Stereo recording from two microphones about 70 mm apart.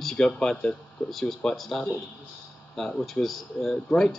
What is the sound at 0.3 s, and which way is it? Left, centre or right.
Speech, centre.